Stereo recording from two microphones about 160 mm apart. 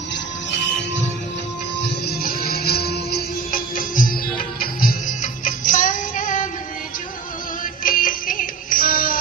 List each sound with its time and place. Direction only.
1.8 s music: 75° left (ahead or behind); by 6.5 s 55° left (ahead or behind)
7.6 s music: 60° left (ahead or behind)